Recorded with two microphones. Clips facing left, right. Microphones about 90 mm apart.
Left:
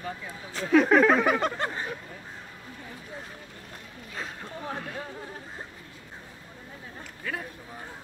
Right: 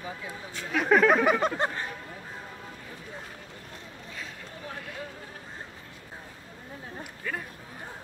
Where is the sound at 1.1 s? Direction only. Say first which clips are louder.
Even; 15° right (ahead or behind).